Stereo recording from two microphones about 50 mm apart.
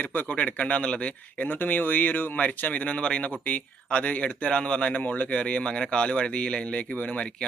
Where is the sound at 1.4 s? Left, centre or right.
Left.